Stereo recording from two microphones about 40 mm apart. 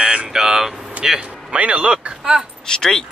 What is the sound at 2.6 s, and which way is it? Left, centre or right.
Speech, centre.